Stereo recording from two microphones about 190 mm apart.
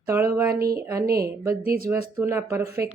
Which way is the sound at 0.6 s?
55° right (ahead or behind).